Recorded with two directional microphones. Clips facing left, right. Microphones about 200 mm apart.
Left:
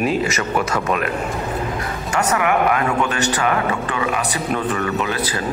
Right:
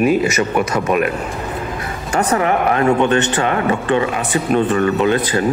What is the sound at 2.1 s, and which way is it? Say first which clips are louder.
A man's voice: right 3 dB; 35° right (ahead or behind).